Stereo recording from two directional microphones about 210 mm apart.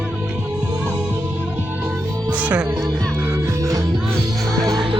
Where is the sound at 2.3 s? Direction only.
5° right (ahead or behind).